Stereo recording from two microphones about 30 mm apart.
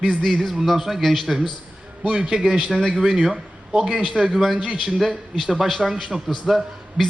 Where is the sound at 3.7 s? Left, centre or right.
Right.